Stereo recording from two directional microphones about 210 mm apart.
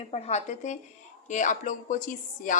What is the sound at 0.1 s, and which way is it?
A woman's voice, 30° left (ahead or behind).